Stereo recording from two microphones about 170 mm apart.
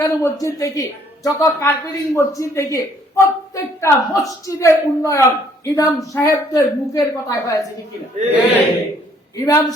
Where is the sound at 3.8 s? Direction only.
20° left (ahead or behind).